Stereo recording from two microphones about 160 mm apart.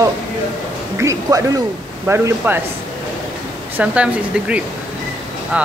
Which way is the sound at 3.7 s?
10° right (ahead or behind).